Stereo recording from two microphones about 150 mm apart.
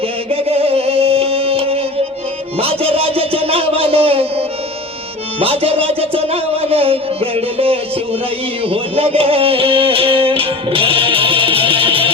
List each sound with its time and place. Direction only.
0.3 s music: 40° right (ahead or behind)